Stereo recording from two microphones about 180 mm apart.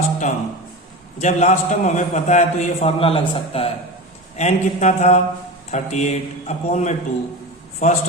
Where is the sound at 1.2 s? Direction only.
40° left (ahead or behind).